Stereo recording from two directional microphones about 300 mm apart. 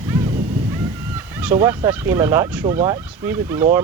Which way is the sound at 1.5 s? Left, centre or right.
Centre.